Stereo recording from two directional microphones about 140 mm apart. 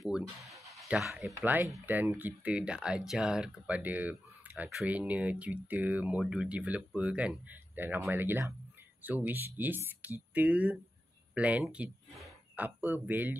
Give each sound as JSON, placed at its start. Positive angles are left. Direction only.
{"t": 0.0, "sound": "speech", "side_deg": 0}
{"t": 1.3, "sound": "speech", "side_deg": -15}